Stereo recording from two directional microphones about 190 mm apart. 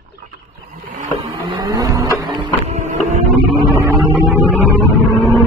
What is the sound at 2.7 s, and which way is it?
Printer, 35° right (ahead or behind).